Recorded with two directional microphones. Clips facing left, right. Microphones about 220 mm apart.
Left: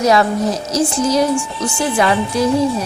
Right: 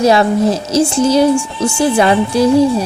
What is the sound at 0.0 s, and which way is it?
Speech, 30° right (ahead or behind).